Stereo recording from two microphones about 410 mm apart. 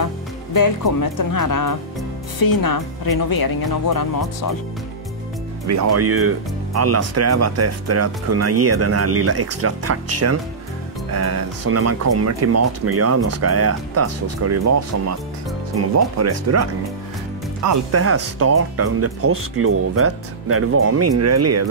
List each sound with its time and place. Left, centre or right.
0.0 s speech: left
5.7 s speech: right
17.6 s speech: right